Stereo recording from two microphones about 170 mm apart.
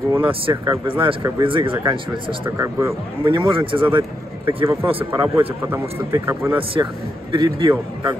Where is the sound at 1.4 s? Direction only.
30° right (ahead or behind).